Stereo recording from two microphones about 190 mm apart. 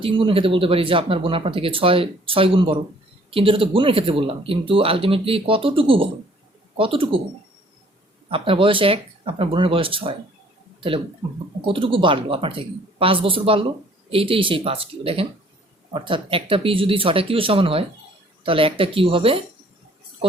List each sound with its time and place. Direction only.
0.0 s speech: 25° right (ahead or behind)
8.3 s speech: 25° right (ahead or behind)
10.8 s a sound: 30° right (ahead or behind)
11.6 s speech: 25° right (ahead or behind)